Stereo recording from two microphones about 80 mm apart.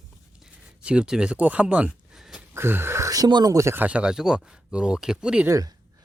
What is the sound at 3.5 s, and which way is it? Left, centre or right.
Speech, right.